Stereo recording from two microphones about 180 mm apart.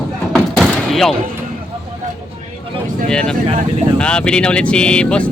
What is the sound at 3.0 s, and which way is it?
Speech, 5° left (ahead or behind).